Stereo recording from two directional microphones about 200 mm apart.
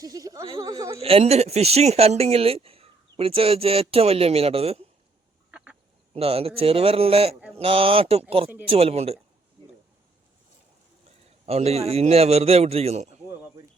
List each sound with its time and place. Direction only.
0.0 s speech: 20° right (ahead or behind)
0.9 s speech: 30° right (ahead or behind)
5.5 s duck: 5° right (ahead or behind)
6.1 s speech: 30° right (ahead or behind)
11.4 s a man's voice: 30° right (ahead or behind)